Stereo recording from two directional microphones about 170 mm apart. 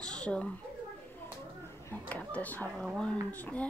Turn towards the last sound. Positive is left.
turn(degrees=10)  # may be behind; listen again after turning